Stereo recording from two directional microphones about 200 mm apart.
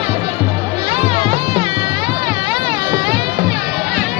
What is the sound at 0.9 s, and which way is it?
Music, 30° right (ahead or behind).